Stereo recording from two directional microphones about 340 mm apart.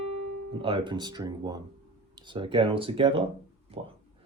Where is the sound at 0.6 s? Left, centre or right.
Centre.